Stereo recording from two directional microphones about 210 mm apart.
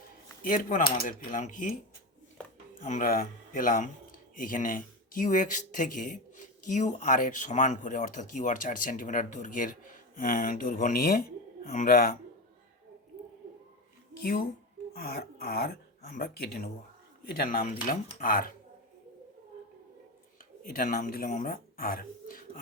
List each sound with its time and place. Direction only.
0.4 s speech: 40° left (ahead or behind)
2.8 s speech: 40° left (ahead or behind)
14.2 s speech: 45° left (ahead or behind)
20.7 s speech: 40° left (ahead or behind)